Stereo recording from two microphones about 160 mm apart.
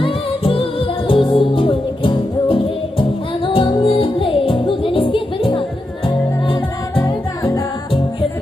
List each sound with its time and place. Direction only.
0.0 s music: 35° left (ahead or behind)